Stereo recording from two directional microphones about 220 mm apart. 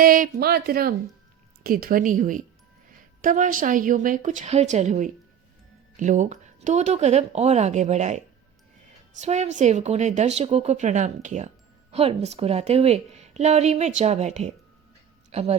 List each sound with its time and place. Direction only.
0.0 s a woman's voice: 40° right (ahead or behind)